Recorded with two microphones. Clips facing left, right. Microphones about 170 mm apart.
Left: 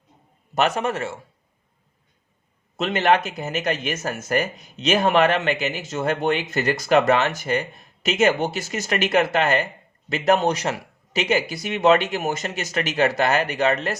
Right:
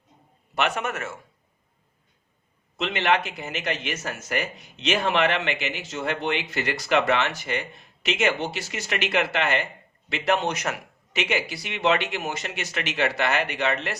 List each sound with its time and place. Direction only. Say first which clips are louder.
0.5 s speech: left 5 dB; 40° left (ahead or behind)
2.7 s speech: left 4 dB; 45° left (ahead or behind)